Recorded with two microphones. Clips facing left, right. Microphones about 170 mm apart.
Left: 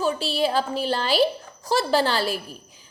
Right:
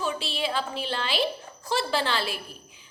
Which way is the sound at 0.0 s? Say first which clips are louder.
Left 6 dB; 40° left (ahead or behind).